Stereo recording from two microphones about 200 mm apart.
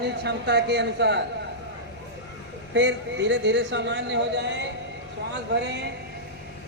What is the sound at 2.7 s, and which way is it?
Speech, 65° right (ahead or behind).